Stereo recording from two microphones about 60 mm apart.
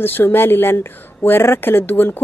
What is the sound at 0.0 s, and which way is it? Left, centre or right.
Speech, left.